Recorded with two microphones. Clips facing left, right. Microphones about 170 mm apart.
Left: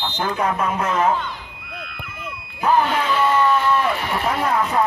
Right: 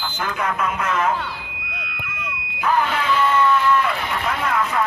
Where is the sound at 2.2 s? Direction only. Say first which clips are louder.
Left 2 dB; 30° left (ahead or behind).